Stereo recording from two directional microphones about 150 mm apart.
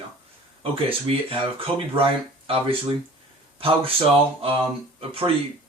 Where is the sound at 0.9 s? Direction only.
40° right (ahead or behind).